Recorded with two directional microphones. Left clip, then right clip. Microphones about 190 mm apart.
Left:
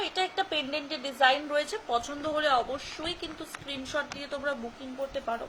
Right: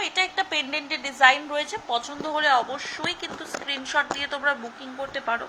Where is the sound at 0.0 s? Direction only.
25° left (ahead or behind).